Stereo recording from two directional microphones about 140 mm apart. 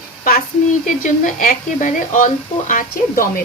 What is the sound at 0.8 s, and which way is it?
Speech, 70° left (ahead or behind).